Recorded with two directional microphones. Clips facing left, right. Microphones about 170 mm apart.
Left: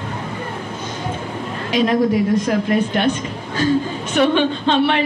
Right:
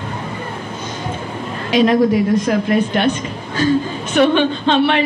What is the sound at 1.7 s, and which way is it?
Speech, 85° right.